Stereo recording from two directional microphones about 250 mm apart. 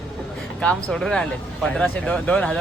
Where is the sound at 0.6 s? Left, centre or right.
Centre.